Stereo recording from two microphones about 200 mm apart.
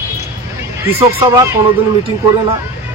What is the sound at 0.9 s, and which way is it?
Speech, 15° right (ahead or behind).